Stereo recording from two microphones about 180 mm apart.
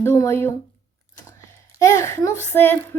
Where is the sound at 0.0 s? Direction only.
15° left (ahead or behind).